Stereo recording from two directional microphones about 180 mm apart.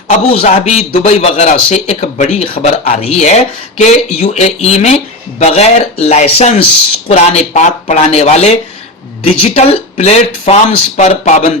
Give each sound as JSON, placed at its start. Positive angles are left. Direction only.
{"t": 0.3, "sound": "a man's voice", "side_deg": 40}